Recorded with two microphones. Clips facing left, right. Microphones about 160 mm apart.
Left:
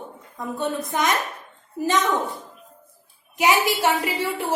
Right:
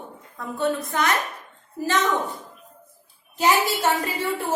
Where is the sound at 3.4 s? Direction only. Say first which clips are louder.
Left 1 dB; 15° left (ahead or behind).